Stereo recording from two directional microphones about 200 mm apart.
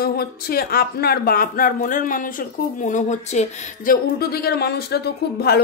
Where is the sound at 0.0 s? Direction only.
50° left (ahead or behind).